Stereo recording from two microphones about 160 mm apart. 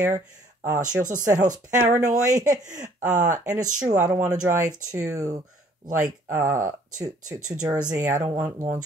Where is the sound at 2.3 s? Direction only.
25° right (ahead or behind).